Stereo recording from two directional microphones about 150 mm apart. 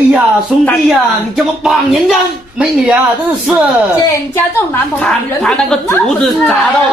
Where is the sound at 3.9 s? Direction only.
20° left (ahead or behind).